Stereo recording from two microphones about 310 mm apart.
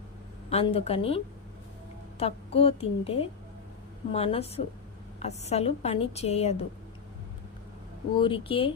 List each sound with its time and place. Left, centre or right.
0.5 s a woman's voice: centre
8.2 s speech: centre